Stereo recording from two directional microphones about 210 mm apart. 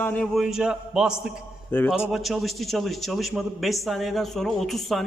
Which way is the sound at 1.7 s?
10° left (ahead or behind).